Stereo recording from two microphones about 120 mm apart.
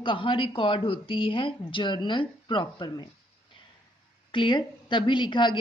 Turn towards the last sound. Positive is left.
turn(degrees=40)  # may be behind; listen again after turning